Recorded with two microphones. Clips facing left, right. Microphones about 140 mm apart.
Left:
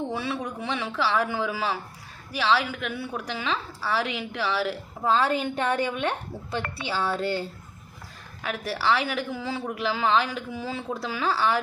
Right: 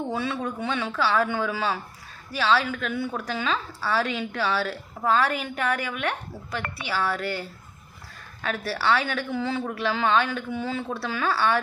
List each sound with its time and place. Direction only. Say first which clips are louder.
0.2 s a woman's voice: right 2 dB; 10° left (ahead or behind)
8.4 s a woman's voice: right 1 dB; 5° left (ahead or behind)